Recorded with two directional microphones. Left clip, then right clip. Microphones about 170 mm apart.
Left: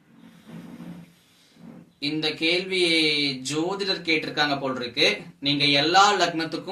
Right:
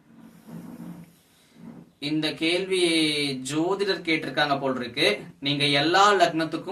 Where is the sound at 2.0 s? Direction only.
15° right (ahead or behind).